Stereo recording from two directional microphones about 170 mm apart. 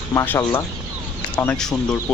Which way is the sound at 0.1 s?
15° left (ahead or behind).